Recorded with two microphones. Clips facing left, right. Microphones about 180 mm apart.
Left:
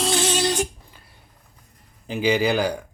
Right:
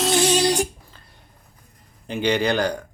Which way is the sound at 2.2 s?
5° left (ahead or behind).